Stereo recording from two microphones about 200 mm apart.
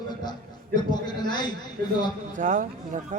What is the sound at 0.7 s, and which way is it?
Speech, 20° left (ahead or behind).